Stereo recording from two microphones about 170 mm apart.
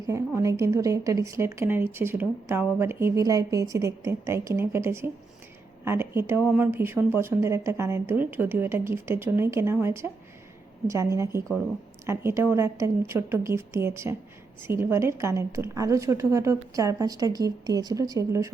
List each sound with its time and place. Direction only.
0.3 s a woman's voice: 20° right (ahead or behind)